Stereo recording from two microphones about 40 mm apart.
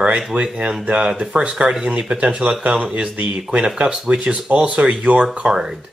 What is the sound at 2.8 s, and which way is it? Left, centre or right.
Speech, right.